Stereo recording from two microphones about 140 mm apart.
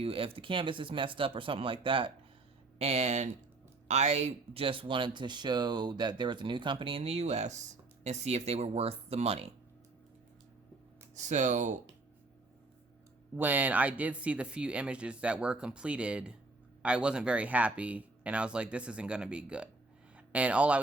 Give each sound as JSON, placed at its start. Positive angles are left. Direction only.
{"t": 0.0, "sound": "speech", "side_deg": -40}
{"t": 2.7, "sound": "speech", "side_deg": -50}
{"t": 11.1, "sound": "speech", "side_deg": -60}
{"t": 13.3, "sound": "speech", "side_deg": -10}